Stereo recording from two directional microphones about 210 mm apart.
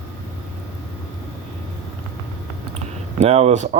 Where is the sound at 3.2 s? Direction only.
30° right (ahead or behind).